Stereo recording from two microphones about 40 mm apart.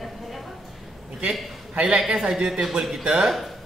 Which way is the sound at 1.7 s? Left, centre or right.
Right.